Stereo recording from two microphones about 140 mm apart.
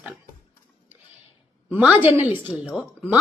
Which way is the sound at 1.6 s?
10° right (ahead or behind).